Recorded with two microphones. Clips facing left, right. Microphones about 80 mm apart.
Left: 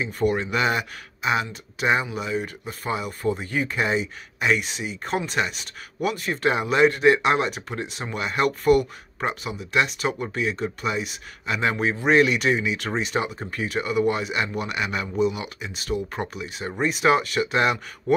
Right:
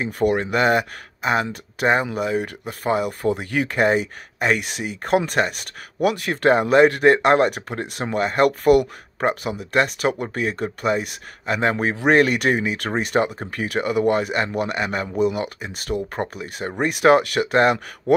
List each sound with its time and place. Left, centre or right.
0.0 s speech: right